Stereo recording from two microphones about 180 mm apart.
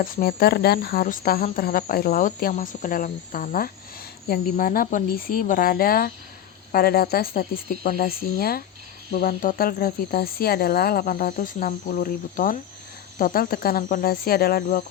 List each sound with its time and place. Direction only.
0.0 s speech: 55° left (ahead or behind)